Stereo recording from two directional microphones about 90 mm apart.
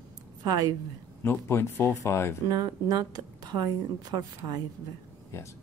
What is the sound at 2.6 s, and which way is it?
Speech, 45° right (ahead or behind).